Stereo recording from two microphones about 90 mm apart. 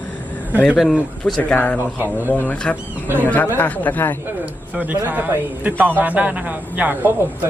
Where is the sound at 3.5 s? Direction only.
20° left (ahead or behind).